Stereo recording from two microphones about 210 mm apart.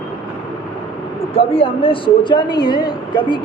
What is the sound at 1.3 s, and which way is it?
A woman's voice, 25° left (ahead or behind).